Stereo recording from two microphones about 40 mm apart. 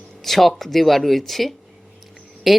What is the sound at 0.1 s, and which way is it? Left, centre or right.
Speech, centre.